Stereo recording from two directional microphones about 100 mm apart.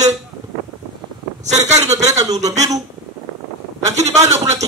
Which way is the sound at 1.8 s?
90° right.